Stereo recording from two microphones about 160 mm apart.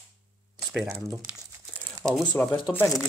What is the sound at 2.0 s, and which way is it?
Speech, 5° left (ahead or behind).